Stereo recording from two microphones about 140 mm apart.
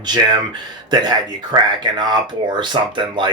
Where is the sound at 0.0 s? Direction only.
30° right (ahead or behind).